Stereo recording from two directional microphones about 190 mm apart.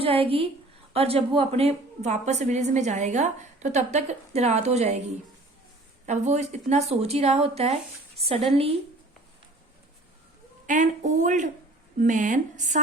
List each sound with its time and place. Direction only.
0.0 s a woman's voice: 30° right (ahead or behind)
6.1 s a woman's voice: 35° right (ahead or behind)
10.7 s a woman's voice: 40° right (ahead or behind)